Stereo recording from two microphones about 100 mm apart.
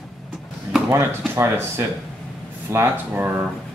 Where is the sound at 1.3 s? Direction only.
25° right (ahead or behind).